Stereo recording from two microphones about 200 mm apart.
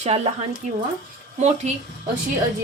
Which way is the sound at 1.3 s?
35° right (ahead or behind).